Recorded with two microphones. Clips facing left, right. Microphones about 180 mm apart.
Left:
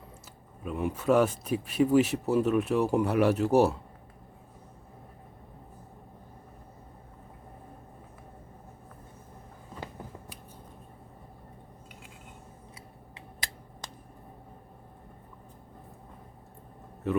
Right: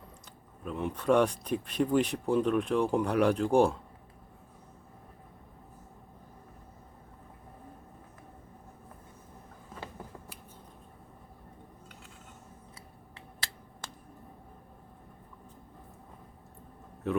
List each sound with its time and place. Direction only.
0.6 s speech: 10° left (ahead or behind)
13.1 s finger snapping: 15° left (ahead or behind)
17.0 s a sound: centre (ahead or behind)